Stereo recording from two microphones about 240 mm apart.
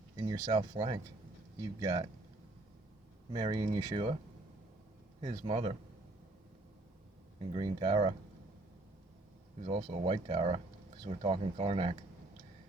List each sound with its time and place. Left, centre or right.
0.2 s speech: centre
3.3 s speech: centre
5.2 s speech: right
7.3 s speech: right
9.6 s speech: right